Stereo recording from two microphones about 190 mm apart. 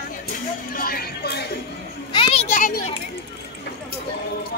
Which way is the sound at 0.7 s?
50° left (ahead or behind).